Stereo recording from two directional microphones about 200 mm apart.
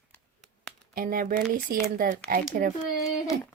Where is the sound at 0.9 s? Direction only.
45° right (ahead or behind).